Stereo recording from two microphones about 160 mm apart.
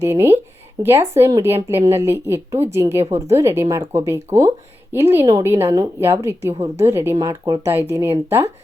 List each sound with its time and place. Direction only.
0.0 s speech: 15° right (ahead or behind)